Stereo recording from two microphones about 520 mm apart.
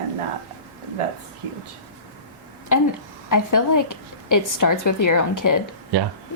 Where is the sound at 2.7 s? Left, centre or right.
Left.